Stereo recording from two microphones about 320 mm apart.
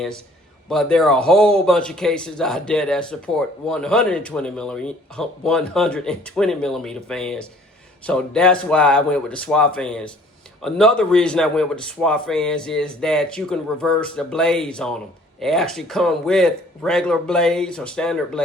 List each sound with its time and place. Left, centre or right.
0.7 s speech: centre